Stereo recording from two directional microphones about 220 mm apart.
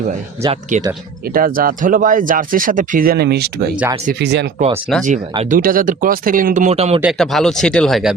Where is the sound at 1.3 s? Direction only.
40° right (ahead or behind).